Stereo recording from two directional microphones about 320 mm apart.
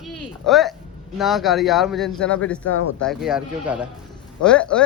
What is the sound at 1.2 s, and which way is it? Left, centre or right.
Speech, centre.